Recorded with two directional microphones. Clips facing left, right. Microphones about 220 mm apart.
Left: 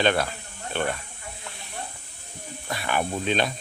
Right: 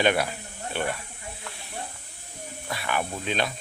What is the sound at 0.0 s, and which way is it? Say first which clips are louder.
Speech: even; 10° right (ahead or behind).